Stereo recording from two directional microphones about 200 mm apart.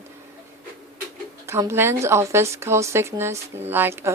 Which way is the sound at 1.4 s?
15° right (ahead or behind).